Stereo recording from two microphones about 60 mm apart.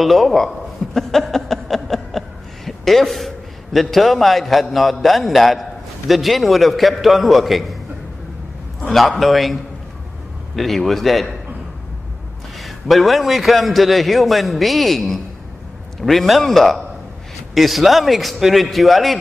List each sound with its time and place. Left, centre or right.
0.0 s a man's voice: centre
8.8 s a man's voice: centre
12.5 s a man's voice: centre